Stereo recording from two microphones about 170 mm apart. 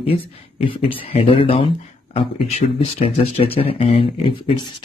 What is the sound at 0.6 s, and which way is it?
Speech, 30° left (ahead or behind).